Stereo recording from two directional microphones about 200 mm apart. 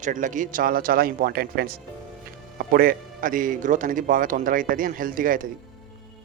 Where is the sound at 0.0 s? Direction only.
40° right (ahead or behind).